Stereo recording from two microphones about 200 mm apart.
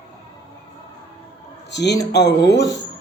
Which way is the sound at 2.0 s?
20° left (ahead or behind).